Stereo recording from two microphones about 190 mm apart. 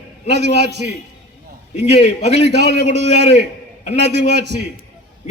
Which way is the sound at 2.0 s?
35° left (ahead or behind).